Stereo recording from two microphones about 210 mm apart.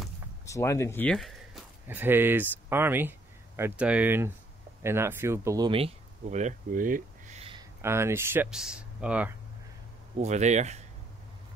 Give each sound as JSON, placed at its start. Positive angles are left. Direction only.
{"t": 0.5, "sound": "speech", "side_deg": 15}
{"t": 5.7, "sound": "a sound", "side_deg": -25}
{"t": 7.8, "sound": "speech", "side_deg": -10}
{"t": 10.1, "sound": "speech", "side_deg": -35}